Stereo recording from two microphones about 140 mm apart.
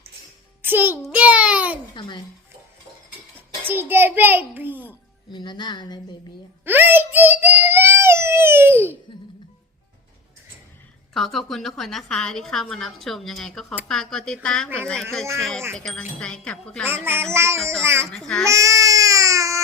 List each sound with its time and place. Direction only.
0.6 s a child's voice: 15° right (ahead or behind)
1.1 s a sound: 10° right (ahead or behind)
2.0 s speech: 35° left (ahead or behind)
3.6 s a child's voice: 15° right (ahead or behind)
5.3 s speech: 30° left (ahead or behind)
6.7 s speech: 15° right (ahead or behind)
11.1 s a woman's voice: centre (ahead or behind)
16.8 s speech: 15° right (ahead or behind)
18.1 s a woman's voice: 5° left (ahead or behind)
18.4 s baby cry: 20° right (ahead or behind)